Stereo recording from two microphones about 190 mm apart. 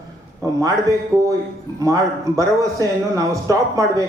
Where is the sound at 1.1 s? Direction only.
15° right (ahead or behind).